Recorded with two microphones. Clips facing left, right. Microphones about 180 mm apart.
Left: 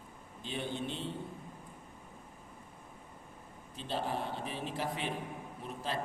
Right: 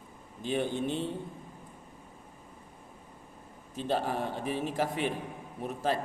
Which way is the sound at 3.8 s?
50° right (ahead or behind).